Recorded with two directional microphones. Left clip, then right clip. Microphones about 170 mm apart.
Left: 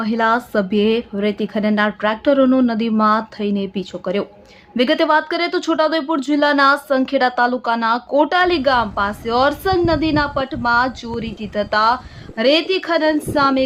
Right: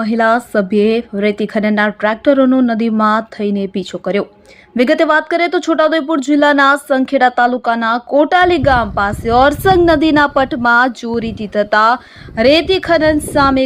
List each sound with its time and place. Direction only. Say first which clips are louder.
0.0 s a woman's voice: right 4 dB; 25° right (ahead or behind)